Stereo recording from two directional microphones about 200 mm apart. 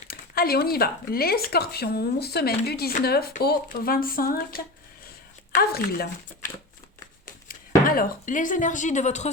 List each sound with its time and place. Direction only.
0.1 s speech: 50° left (ahead or behind)
7.9 s speech: 45° left (ahead or behind)